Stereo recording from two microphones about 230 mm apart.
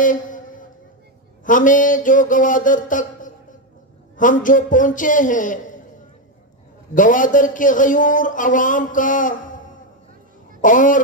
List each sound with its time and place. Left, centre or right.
0.0 s a sound: left
4.2 s a man's voice: left
7.0 s a man's voice: left